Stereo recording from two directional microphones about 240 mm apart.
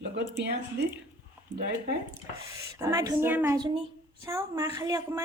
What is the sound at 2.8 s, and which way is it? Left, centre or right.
A woman's voice, centre.